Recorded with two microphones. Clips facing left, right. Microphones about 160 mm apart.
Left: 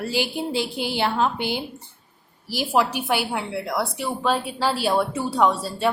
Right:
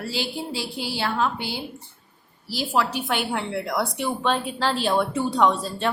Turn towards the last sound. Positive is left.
turn(degrees=10)  # may be behind; listen again after turning